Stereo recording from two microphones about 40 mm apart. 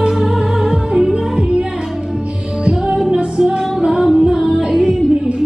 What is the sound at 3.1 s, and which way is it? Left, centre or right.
Music, right.